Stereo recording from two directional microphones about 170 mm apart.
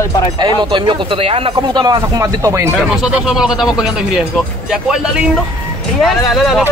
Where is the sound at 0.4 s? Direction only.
25° right (ahead or behind).